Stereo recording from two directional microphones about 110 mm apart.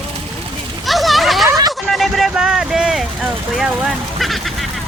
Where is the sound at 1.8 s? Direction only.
Centre (ahead or behind).